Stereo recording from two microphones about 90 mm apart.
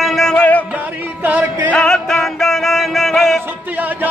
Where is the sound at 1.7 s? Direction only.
10° left (ahead or behind).